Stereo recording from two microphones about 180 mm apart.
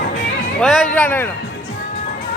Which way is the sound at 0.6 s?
Centre (ahead or behind).